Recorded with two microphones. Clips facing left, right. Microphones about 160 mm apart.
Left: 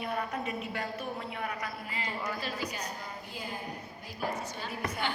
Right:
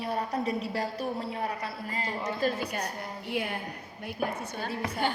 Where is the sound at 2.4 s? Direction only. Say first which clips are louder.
Right 7 dB; 55° right (ahead or behind).